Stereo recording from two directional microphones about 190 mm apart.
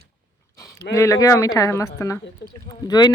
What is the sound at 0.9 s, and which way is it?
Speech, 15° left (ahead or behind).